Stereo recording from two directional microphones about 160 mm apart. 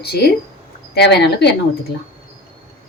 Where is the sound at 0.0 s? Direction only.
80° left.